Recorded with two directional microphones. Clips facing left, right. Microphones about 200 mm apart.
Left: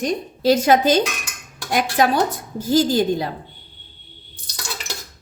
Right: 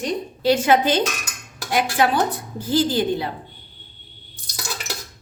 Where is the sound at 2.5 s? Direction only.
40° left (ahead or behind).